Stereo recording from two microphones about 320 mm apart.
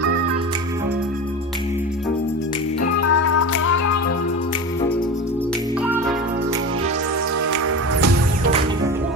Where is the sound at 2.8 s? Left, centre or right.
Left.